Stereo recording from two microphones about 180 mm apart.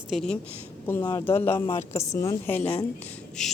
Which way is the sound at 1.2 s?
10° left (ahead or behind).